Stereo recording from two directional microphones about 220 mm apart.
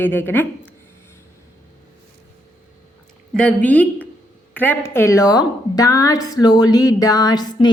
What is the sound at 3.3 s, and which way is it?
A woman's voice, 5° left (ahead or behind).